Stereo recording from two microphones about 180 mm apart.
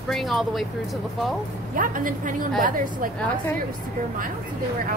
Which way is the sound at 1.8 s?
50° right (ahead or behind).